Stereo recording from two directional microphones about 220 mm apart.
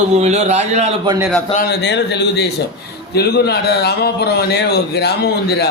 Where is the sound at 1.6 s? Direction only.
50° left (ahead or behind).